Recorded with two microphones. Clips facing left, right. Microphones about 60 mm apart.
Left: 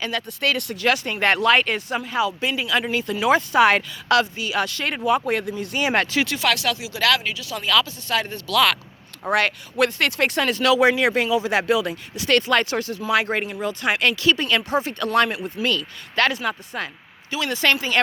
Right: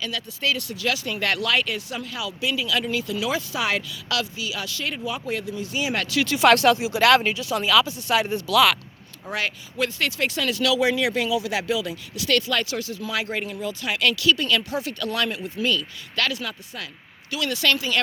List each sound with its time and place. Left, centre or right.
0.4 s speech: left
1.1 s speech: left
6.0 s speech: left
6.5 s speech: right
7.5 s speech: centre
9.2 s speech: left
15.6 s speech: left
16.1 s speech: left